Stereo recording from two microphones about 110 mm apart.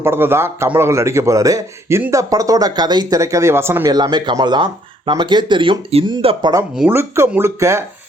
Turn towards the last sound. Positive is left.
turn(degrees=-25)  # may be behind; listen again after turning